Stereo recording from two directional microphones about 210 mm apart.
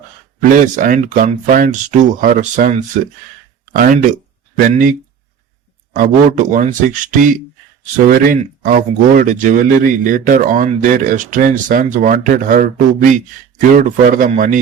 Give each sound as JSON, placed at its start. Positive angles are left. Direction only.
{"t": 0.5, "sound": "speech", "side_deg": -40}